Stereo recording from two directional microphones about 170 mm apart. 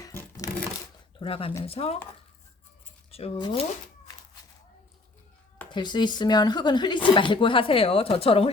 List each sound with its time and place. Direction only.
0.0 s a sound: 15° left (ahead or behind)
1.2 s speech: 35° left (ahead or behind)
3.1 s speech: 35° left (ahead or behind)
5.7 s a woman's voice: 25° left (ahead or behind)